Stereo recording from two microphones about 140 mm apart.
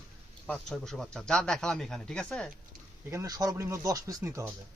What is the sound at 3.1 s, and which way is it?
Speech, 25° right (ahead or behind).